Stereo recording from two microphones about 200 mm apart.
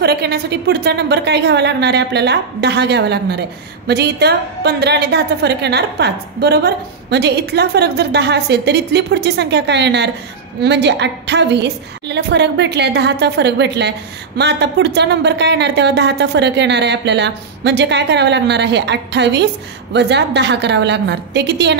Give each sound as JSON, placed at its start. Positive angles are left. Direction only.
{"t": 0.0, "sound": "a woman's voice", "side_deg": -55}